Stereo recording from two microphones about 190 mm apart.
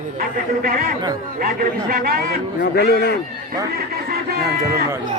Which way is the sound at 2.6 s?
60° left (ahead or behind).